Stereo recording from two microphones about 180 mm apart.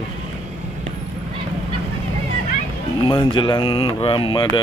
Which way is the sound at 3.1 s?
25° left (ahead or behind).